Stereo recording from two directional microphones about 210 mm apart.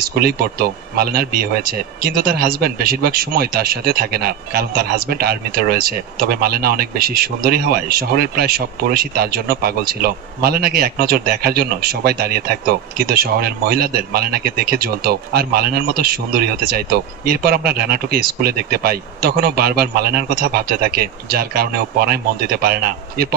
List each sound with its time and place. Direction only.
0.0 s speech: 45° right (ahead or behind)